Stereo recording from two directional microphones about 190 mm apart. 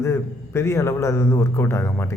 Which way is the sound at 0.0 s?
15° left (ahead or behind).